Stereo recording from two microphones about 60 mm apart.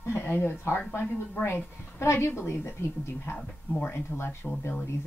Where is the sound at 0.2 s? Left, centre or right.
Left.